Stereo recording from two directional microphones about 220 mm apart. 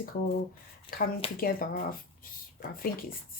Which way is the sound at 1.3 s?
40° left (ahead or behind).